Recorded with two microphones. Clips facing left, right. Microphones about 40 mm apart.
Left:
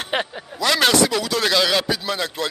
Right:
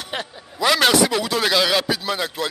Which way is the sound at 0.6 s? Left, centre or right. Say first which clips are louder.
Right 1 dB; centre.